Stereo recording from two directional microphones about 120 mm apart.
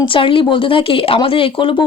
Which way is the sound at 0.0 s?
45° left (ahead or behind).